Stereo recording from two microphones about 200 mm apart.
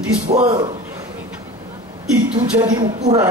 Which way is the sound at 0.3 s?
30° right (ahead or behind).